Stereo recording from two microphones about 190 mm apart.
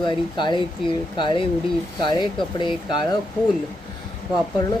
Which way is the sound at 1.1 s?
25° left (ahead or behind).